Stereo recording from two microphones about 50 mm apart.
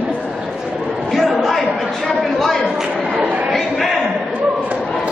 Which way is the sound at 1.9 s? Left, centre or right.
Centre.